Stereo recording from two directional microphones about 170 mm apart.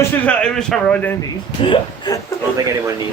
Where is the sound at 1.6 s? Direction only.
25° left (ahead or behind).